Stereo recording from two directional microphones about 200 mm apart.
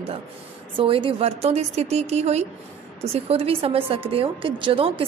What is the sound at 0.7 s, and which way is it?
A woman's voice, 25° right (ahead or behind).